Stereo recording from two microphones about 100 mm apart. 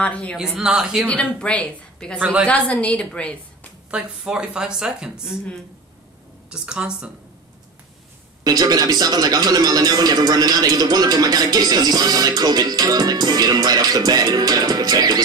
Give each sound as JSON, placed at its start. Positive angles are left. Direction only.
{"t": 0.0, "sound": "a woman's voice", "side_deg": 10}
{"t": 0.4, "sound": "speech", "side_deg": -5}
{"t": 1.0, "sound": "a woman's voice", "side_deg": 10}
{"t": 2.1, "sound": "a woman's voice", "side_deg": -15}
{"t": 2.4, "sound": "a woman's voice", "side_deg": 15}
{"t": 3.9, "sound": "a woman's voice", "side_deg": -10}
{"t": 6.5, "sound": "a woman's voice", "side_deg": -10}
{"t": 8.5, "sound": "speech", "side_deg": -40}